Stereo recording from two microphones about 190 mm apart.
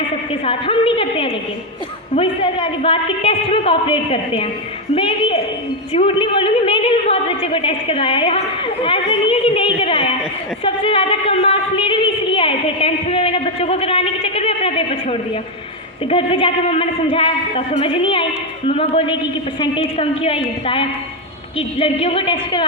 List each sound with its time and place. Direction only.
0.4 s a woman's voice: 30° left (ahead or behind)
10.6 s a sound: 30° left (ahead or behind)
16.0 s a woman's voice: 30° left (ahead or behind)